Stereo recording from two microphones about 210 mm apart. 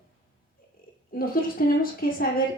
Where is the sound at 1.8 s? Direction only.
45° left (ahead or behind).